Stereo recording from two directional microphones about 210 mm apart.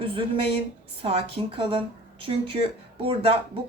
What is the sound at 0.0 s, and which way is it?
Speech, 25° right (ahead or behind).